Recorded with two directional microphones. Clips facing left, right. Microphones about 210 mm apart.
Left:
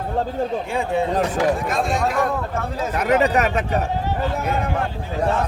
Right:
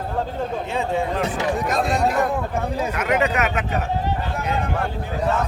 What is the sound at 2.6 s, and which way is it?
Speech, 15° right (ahead or behind).